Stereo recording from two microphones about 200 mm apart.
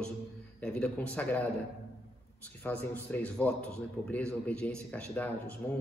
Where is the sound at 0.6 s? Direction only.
5° left (ahead or behind).